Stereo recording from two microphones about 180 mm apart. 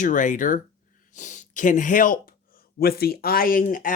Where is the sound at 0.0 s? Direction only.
45° left (ahead or behind).